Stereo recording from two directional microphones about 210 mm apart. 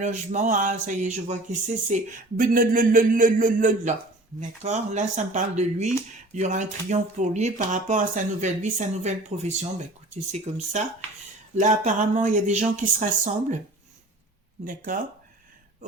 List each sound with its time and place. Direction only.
0.0 s speech: 35° right (ahead or behind)
2.4 s speech: 40° right (ahead or behind)
14.6 s speech: 40° right (ahead or behind)